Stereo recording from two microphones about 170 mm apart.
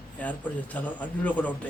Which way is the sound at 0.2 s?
10° left (ahead or behind).